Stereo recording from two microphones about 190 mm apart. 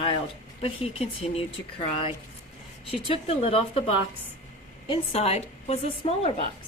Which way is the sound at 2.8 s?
30° left (ahead or behind).